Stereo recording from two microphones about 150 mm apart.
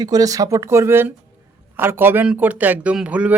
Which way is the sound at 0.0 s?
25° right (ahead or behind).